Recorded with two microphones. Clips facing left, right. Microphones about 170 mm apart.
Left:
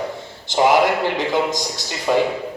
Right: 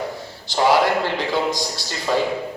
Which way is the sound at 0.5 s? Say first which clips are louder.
Left 2 dB; 20° left (ahead or behind).